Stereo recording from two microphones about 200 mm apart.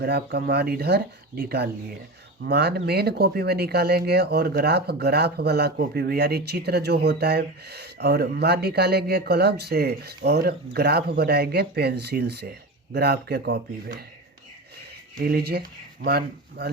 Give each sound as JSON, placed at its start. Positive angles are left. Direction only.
{"t": 0.0, "sound": "speech", "side_deg": -55}
{"t": 15.2, "sound": "speech", "side_deg": -50}